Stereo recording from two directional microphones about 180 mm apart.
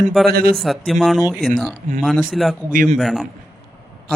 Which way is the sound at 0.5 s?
Centre (ahead or behind).